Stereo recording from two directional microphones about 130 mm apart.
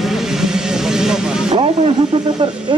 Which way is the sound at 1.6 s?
45° right (ahead or behind).